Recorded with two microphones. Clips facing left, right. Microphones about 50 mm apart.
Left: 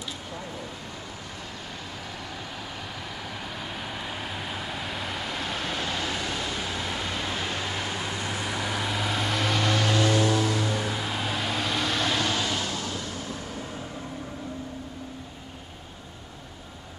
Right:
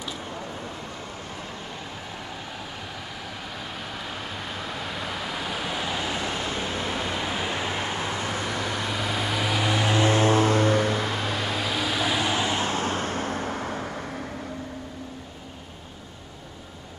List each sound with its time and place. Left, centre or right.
4.5 s vehicle: centre; by 6.9 s right
6.9 s vehicle: centre; by 8.5 s right
8.5 s vehicle: centre; by 11.1 s right
11.1 s vehicle: centre; by 14.0 s right